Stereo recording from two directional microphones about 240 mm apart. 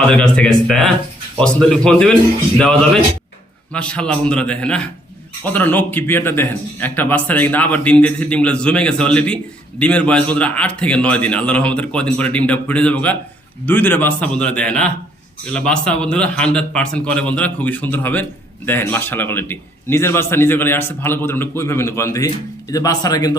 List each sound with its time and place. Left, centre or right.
0.1 s a man's voice: centre